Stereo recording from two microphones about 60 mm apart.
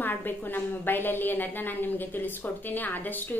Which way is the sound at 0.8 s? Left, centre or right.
Left.